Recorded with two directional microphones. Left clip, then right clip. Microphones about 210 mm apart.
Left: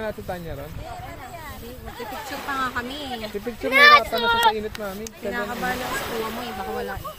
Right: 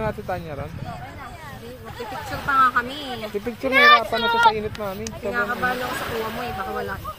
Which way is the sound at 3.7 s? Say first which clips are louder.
Left 1 dB; 40° left (ahead or behind).